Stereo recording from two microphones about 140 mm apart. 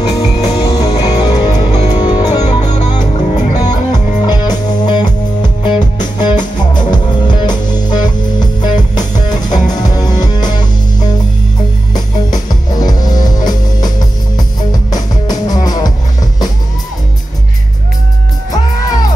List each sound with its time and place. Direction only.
0.2 s music: 30° left (ahead or behind)